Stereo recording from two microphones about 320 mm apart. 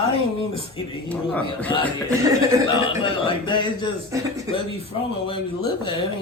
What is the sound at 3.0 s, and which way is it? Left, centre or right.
Speech, centre.